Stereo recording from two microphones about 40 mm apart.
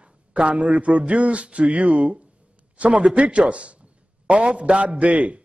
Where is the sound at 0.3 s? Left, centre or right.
Right.